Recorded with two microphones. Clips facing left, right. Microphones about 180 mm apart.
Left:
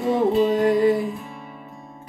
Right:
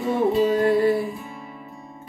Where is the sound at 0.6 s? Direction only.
20° left (ahead or behind).